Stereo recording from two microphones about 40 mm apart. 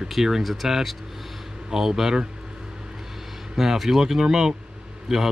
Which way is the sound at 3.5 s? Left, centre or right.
Centre.